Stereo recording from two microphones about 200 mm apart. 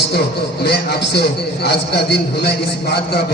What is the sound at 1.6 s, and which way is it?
Speech, 55° left (ahead or behind).